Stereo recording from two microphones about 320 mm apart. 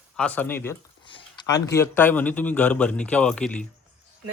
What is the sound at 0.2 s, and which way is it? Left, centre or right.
Speech, centre.